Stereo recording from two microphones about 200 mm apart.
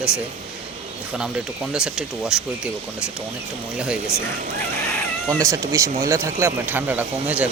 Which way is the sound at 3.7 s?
5° right (ahead or behind).